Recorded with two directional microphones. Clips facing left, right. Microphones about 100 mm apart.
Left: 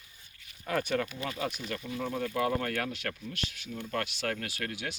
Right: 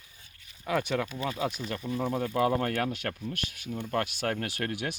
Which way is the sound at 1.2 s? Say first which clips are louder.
Right 3 dB; 20° right (ahead or behind).